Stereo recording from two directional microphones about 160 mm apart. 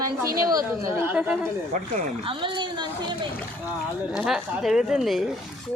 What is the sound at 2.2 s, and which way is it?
Speech, 30° right (ahead or behind).